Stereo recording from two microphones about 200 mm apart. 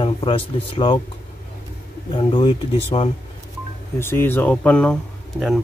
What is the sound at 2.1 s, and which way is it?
Speech, 25° left (ahead or behind).